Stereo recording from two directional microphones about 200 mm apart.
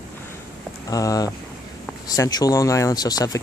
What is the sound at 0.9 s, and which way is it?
Speech, 15° left (ahead or behind).